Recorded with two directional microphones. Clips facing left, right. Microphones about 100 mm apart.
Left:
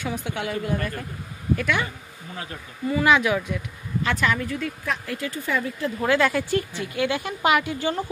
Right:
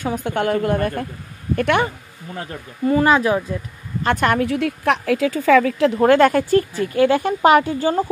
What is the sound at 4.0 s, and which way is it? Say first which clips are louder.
Speech: right 6 dB; 50° right (ahead or behind).